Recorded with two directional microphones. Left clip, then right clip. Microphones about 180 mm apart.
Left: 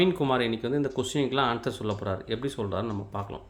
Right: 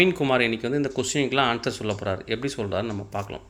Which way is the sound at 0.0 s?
10° left (ahead or behind).